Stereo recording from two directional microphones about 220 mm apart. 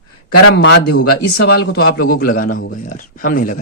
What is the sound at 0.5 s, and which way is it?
A man's voice, 50° left (ahead or behind).